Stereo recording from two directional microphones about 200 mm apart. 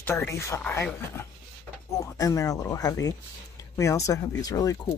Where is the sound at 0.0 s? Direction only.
10° left (ahead or behind).